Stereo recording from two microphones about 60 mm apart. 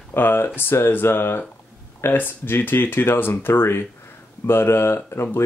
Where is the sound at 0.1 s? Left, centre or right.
Left.